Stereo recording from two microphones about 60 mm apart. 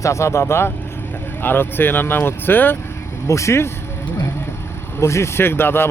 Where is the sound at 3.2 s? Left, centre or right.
Left.